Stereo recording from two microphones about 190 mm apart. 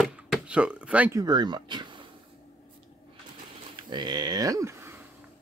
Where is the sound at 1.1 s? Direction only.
20° right (ahead or behind).